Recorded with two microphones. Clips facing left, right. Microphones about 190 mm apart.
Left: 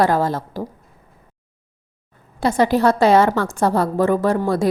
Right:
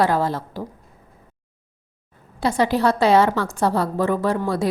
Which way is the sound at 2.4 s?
45° left (ahead or behind).